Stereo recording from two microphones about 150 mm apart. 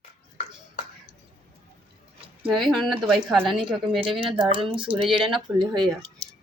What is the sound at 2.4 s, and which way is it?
Speech, centre (ahead or behind).